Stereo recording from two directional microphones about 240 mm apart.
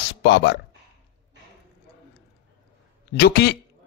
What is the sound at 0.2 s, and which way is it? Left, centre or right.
Speech, left.